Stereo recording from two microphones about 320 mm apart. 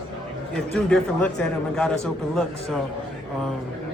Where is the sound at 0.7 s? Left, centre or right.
Centre.